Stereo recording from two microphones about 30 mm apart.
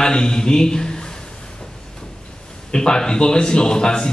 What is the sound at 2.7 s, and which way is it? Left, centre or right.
A man's voice, left.